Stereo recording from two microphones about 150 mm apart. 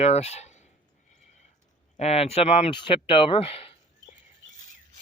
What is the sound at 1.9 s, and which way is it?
Speech, 45° left (ahead or behind).